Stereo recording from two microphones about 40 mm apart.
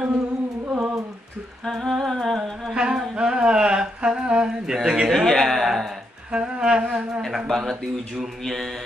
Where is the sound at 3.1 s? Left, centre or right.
Right.